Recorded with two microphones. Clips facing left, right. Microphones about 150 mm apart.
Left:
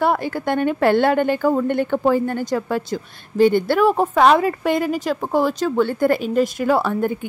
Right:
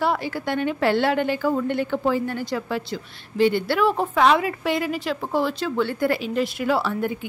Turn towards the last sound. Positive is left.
turn(degrees=50)  # may be behind; listen again after turning